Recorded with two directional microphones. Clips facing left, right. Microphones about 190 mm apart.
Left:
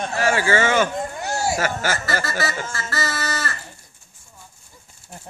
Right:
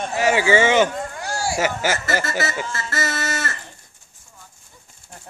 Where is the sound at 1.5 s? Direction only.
15° right (ahead or behind).